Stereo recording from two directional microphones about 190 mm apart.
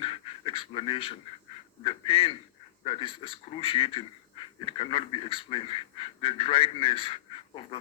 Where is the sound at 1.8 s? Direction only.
30° left (ahead or behind).